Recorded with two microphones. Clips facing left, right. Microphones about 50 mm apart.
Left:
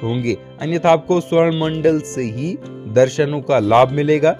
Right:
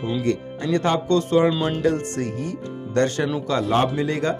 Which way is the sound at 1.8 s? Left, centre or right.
Left.